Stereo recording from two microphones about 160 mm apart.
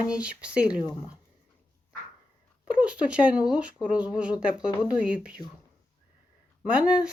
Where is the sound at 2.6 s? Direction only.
5° right (ahead or behind).